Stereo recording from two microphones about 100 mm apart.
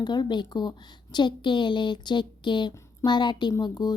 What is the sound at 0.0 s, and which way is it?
Speech, 45° left (ahead or behind).